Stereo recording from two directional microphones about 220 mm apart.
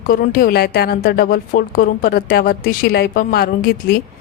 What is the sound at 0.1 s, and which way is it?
A woman's voice, 40° left (ahead or behind).